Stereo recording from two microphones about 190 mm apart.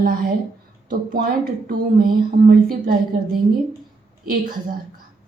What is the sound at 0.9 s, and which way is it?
A woman's voice, 45° right (ahead or behind).